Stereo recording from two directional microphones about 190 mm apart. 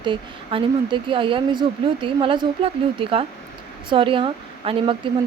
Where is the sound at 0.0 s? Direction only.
25° right (ahead or behind).